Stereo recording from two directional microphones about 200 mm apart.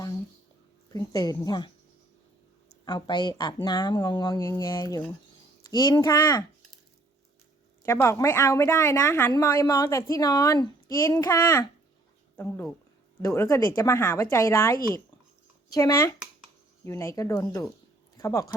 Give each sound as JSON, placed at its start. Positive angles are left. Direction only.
{"t": 0.9, "sound": "speech", "side_deg": 20}
{"t": 2.8, "sound": "speech", "side_deg": 20}
{"t": 7.9, "sound": "speech", "side_deg": 15}